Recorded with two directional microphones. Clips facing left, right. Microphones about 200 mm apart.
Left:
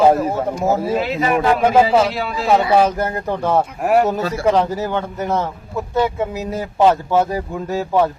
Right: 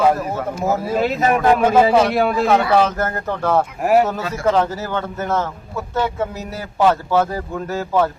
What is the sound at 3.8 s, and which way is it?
Speech, centre (ahead or behind).